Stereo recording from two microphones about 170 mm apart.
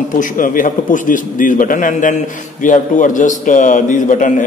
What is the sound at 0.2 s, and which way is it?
A man's voice, 50° left (ahead or behind).